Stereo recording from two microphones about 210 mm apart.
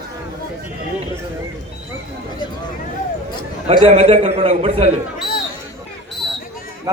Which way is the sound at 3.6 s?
30° right (ahead or behind).